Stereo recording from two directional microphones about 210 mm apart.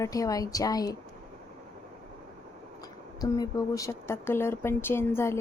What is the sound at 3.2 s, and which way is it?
Speech, 15° left (ahead or behind).